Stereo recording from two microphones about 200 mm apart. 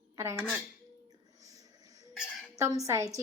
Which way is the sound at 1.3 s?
15° right (ahead or behind).